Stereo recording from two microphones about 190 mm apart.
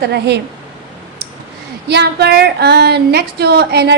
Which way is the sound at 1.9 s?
60° right (ahead or behind).